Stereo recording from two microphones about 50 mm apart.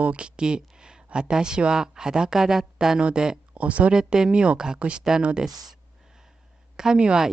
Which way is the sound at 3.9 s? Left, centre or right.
Centre.